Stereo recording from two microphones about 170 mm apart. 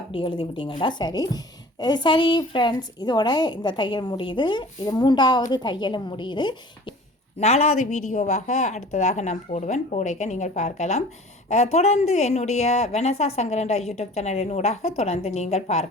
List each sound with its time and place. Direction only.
0.1 s a woman's voice: 30° left (ahead or behind)
7.3 s a woman's voice: 40° left (ahead or behind)